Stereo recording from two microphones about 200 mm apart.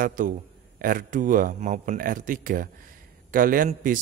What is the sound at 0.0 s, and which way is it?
A man's voice, 40° right (ahead or behind).